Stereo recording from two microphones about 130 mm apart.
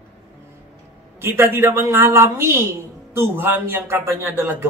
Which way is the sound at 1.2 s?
15° right (ahead or behind).